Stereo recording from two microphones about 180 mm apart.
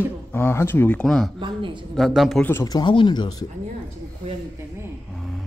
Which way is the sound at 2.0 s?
Centre (ahead or behind).